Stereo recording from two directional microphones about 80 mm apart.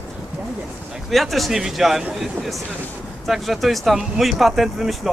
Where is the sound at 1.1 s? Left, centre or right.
Centre.